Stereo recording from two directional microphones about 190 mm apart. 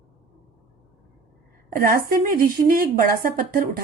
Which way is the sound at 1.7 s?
50° right (ahead or behind).